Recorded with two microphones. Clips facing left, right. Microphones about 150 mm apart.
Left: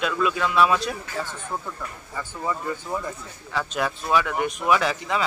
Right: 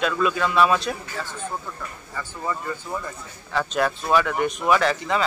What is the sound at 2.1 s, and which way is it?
Speech, 15° left (ahead or behind).